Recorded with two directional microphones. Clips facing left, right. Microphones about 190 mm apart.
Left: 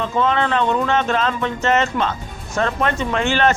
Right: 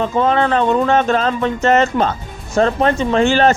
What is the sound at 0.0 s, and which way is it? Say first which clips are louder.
Speech: right 4 dB; 40° right (ahead or behind).